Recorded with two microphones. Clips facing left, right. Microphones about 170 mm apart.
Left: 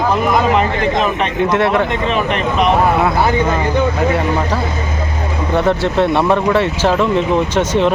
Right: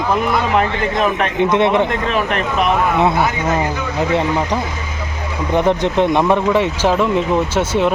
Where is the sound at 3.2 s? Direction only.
30° left (ahead or behind).